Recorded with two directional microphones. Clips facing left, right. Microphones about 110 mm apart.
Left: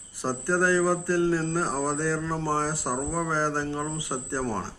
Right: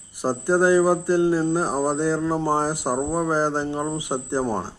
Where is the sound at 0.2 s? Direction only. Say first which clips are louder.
Right 6 dB; 15° right (ahead or behind).